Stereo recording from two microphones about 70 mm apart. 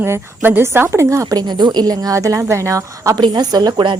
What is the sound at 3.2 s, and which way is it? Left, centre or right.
Speech, right.